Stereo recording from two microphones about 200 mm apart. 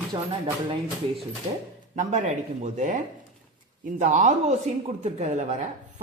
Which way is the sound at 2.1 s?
35° right (ahead or behind).